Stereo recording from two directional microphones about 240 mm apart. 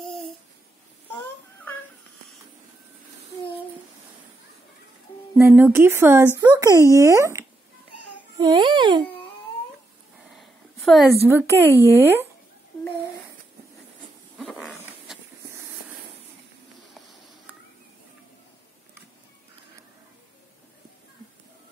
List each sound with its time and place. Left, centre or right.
5.3 s a woman's voice: centre
7.9 s a sound: left
8.4 s speech: centre
10.3 s a sound: centre
11.1 s a woman's voice: centre
14.4 s dog: centre